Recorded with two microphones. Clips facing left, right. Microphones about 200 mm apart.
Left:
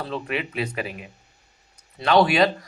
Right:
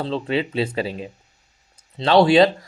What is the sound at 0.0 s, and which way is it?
Speech, 30° right (ahead or behind).